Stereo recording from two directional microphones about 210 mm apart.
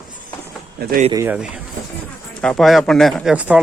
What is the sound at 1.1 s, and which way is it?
Speech, 10° right (ahead or behind).